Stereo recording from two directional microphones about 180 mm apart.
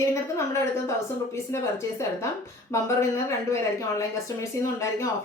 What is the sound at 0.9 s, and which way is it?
Speech, 15° left (ahead or behind).